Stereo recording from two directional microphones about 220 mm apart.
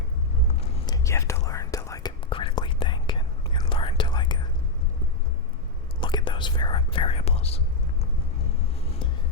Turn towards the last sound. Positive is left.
turn(degrees=25)  # may be behind; listen again after turning